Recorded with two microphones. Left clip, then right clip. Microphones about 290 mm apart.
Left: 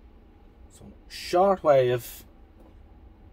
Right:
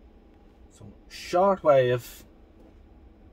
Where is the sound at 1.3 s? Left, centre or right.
Centre.